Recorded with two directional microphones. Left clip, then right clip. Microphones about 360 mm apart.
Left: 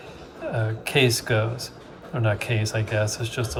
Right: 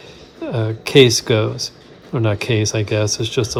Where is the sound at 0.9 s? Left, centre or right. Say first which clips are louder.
Right 10 dB; centre.